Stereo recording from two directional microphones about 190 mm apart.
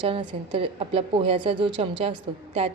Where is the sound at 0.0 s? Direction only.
25° right (ahead or behind).